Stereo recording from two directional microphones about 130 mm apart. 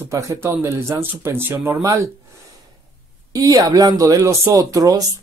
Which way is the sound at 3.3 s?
30° right (ahead or behind).